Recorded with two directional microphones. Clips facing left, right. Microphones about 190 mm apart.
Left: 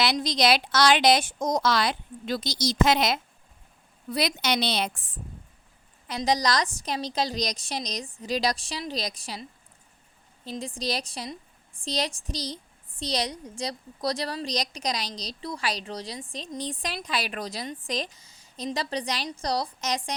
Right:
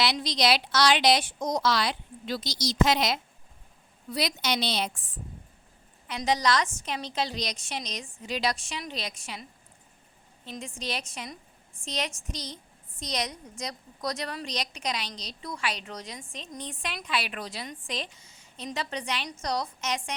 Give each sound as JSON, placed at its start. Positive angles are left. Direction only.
{"t": 0.0, "sound": "a woman's voice", "side_deg": 45}
{"t": 6.1, "sound": "speech", "side_deg": 35}